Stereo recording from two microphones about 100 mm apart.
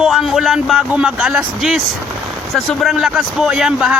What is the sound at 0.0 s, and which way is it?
A man's voice, 5° right (ahead or behind).